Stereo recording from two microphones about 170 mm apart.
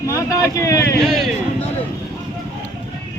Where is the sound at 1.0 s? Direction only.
Centre (ahead or behind).